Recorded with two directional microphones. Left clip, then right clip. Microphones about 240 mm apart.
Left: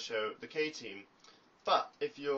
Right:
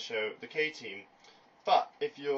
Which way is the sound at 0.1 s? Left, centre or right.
Centre.